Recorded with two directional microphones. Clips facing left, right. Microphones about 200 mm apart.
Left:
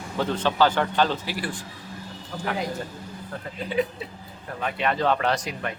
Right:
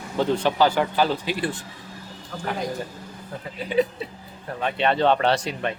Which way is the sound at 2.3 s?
5° left (ahead or behind).